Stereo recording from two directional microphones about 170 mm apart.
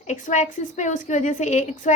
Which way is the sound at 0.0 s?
45° left (ahead or behind).